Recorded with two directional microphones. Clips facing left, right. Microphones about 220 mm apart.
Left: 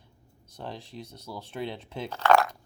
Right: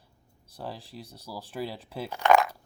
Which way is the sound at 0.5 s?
5° right (ahead or behind).